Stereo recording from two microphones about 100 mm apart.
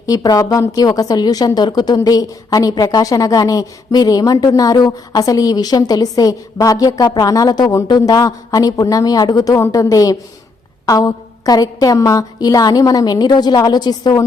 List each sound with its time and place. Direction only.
0.0 s a woman's voice: 35° left (ahead or behind)